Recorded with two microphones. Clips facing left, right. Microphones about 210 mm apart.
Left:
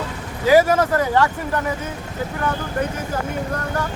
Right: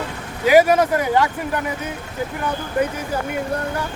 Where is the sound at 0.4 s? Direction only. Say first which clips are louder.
Right 1 dB; 15° right (ahead or behind).